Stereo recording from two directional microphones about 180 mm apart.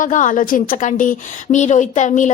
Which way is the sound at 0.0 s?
45° left (ahead or behind).